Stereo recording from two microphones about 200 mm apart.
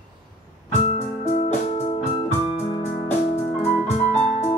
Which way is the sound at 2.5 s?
30° left (ahead or behind).